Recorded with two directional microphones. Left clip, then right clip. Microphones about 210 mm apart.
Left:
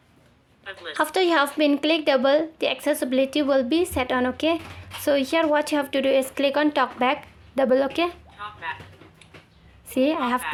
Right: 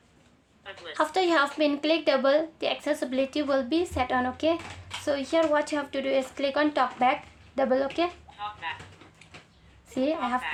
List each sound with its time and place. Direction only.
0.6 s a woman's voice: 25° left (ahead or behind); by 8.1 s 40° left (ahead or behind)
8.4 s speech: 25° left (ahead or behind)
9.9 s a woman's voice: 40° left (ahead or behind)